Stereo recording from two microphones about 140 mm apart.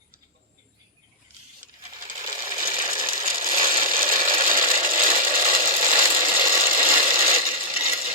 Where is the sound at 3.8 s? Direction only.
80° right.